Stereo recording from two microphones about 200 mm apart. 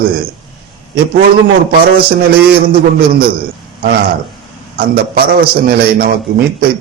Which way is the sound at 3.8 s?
45° right (ahead or behind).